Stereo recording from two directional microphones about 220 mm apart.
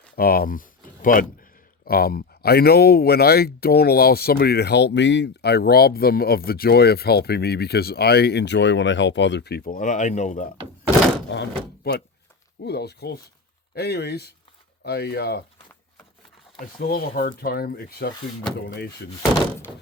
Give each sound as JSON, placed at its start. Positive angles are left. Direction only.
{"t": 0.2, "sound": "speech", "side_deg": 40}
{"t": 11.3, "sound": "speech", "side_deg": 50}
{"t": 16.8, "sound": "speech", "side_deg": 45}